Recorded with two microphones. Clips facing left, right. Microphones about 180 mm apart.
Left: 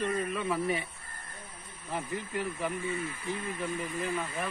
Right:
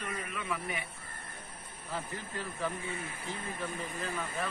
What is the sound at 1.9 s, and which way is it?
Speech, 15° left (ahead or behind).